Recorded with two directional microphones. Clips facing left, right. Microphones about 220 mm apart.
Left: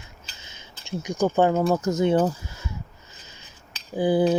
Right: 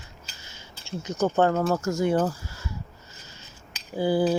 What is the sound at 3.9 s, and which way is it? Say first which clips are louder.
Speech: left 2 dB; 20° left (ahead or behind).